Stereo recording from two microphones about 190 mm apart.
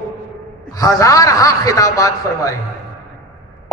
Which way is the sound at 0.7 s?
20° left (ahead or behind).